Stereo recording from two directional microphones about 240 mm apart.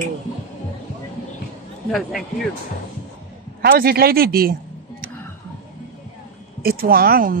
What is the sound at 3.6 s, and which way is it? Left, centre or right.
Speech, right.